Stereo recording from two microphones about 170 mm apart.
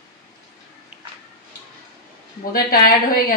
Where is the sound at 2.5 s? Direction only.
60° left (ahead or behind).